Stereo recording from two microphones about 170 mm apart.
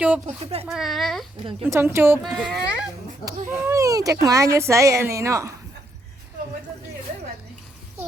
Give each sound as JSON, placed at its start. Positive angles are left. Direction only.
{"t": 0.7, "sound": "speech", "side_deg": 0}
{"t": 1.6, "sound": "speech", "side_deg": -15}
{"t": 2.2, "sound": "speech", "side_deg": 0}
{"t": 3.6, "sound": "speech", "side_deg": -20}